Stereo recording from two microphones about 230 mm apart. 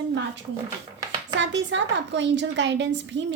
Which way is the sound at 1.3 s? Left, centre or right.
Right.